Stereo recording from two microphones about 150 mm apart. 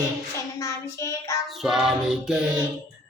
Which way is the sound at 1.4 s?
Centre (ahead or behind).